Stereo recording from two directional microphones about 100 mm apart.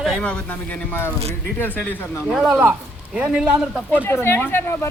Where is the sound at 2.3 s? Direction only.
5° right (ahead or behind).